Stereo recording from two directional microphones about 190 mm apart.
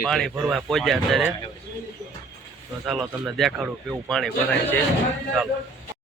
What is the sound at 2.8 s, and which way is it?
Speech, centre (ahead or behind).